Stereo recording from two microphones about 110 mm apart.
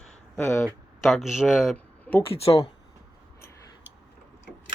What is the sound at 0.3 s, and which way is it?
Speech, 25° left (ahead or behind).